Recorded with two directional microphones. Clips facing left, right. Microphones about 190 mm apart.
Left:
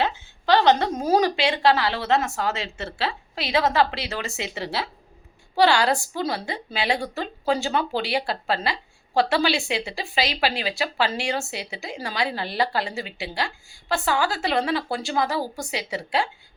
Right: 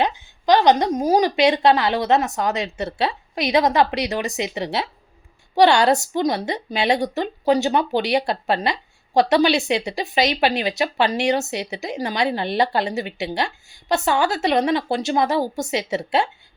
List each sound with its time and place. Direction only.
0.0 s a woman's voice: 15° right (ahead or behind)